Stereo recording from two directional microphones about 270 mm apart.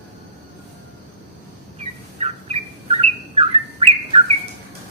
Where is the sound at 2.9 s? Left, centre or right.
Right.